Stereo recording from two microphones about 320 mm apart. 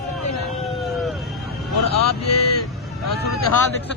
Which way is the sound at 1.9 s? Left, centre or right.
Left.